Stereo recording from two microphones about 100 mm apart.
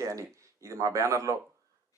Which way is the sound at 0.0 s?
30° right (ahead or behind).